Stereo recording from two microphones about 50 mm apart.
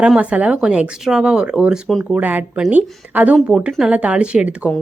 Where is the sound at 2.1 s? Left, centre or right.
Right.